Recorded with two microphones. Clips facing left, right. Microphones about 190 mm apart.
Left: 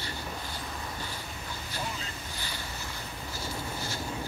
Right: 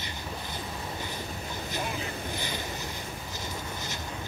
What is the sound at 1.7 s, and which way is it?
Boat, 20° right (ahead or behind).